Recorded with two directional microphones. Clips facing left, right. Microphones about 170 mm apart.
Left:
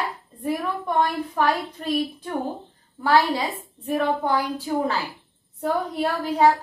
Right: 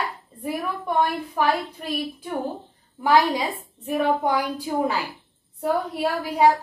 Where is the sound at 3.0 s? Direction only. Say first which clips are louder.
Right 1 dB; 15° right (ahead or behind).